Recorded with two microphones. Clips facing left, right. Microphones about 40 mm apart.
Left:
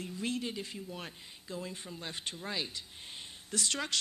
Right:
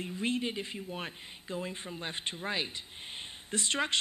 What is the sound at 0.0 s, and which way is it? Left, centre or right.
Speech, right.